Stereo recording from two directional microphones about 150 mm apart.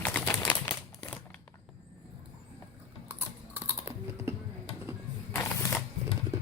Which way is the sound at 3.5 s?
15° right (ahead or behind).